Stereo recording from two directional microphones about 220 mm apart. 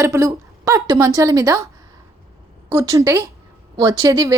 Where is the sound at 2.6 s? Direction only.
15° right (ahead or behind).